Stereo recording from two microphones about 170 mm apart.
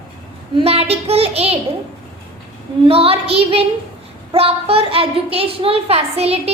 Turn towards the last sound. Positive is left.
turn(degrees=-35)  # may be behind; listen again after turning